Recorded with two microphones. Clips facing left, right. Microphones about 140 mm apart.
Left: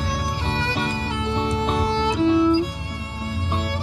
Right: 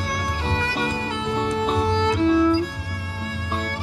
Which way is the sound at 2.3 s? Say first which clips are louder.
Left 2 dB; 15° left (ahead or behind).